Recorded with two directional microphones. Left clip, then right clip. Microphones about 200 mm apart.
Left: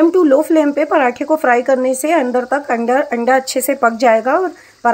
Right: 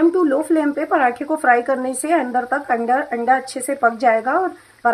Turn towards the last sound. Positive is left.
turn(degrees=35)  # may be behind; listen again after turning